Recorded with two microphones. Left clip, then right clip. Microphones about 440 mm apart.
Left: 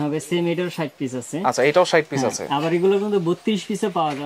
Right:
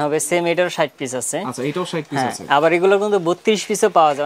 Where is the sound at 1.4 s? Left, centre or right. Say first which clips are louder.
Left 8 dB; left.